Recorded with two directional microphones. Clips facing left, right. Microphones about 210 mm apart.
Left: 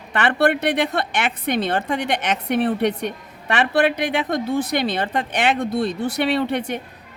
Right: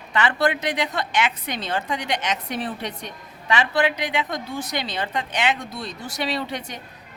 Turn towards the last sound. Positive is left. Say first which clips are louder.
# left 7 dB
turn(degrees=60)  # may be behind; listen again after turning